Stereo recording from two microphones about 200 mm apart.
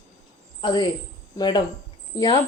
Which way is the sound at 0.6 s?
20° left (ahead or behind).